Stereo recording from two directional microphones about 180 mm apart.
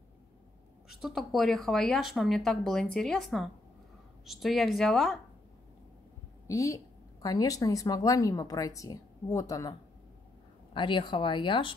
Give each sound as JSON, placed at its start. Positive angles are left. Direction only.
{"t": 0.8, "sound": "speech", "side_deg": 0}
{"t": 6.4, "sound": "a woman's voice", "side_deg": 15}